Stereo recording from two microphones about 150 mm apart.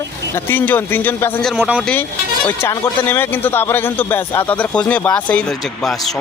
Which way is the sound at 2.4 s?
15° left (ahead or behind).